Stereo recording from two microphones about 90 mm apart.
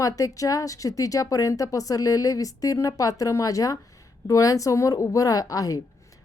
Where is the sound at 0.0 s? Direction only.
40° left (ahead or behind).